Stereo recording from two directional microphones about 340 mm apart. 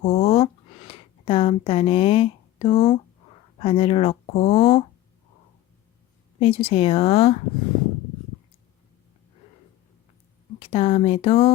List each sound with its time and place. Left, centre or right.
0.0 s a sound: centre
3.6 s speech: centre
6.4 s speech: centre
10.6 s speech: centre